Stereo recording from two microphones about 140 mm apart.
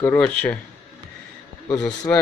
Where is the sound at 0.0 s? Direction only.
15° left (ahead or behind).